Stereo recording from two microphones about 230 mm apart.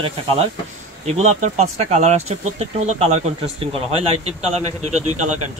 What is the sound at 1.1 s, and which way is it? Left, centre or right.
Speech, right.